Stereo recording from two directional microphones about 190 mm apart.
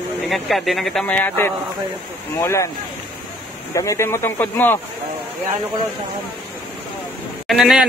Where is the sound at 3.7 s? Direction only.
15° left (ahead or behind).